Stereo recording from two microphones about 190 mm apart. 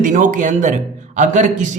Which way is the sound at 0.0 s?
45° right (ahead or behind).